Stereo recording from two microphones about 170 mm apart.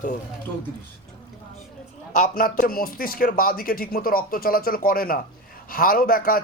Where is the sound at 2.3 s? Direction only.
60° left (ahead or behind).